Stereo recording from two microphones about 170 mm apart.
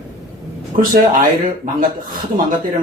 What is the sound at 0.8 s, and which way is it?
Speech, 55° right (ahead or behind).